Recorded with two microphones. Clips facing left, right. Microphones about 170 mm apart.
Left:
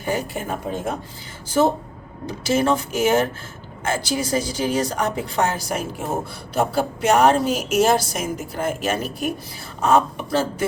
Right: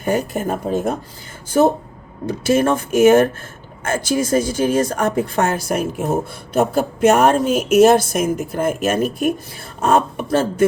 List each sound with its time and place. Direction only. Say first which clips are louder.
0.0 s a woman's voice: right 5 dB; 50° right (ahead or behind)
2.2 s a woman's voice: right 4 dB; 55° right (ahead or behind)